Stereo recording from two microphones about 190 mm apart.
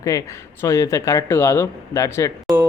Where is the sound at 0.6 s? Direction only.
15° left (ahead or behind).